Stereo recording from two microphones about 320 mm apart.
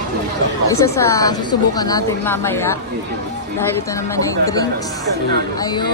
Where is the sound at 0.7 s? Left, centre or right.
Centre.